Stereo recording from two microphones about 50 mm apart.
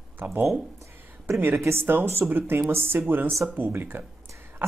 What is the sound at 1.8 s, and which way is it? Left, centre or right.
Speech, right.